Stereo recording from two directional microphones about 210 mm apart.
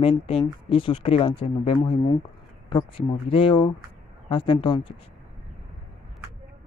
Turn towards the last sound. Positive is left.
turn(degrees=25)  # may be behind; listen again after turning